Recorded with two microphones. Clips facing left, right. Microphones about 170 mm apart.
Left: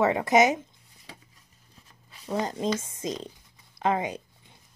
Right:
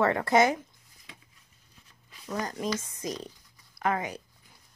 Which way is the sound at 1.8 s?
25° left (ahead or behind).